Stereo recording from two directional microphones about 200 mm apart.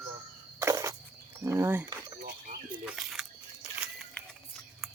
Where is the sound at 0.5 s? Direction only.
15° right (ahead or behind).